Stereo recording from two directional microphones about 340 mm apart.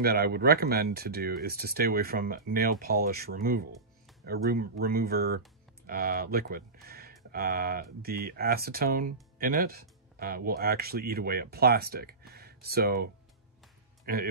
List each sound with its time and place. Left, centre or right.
0.0 s speech: right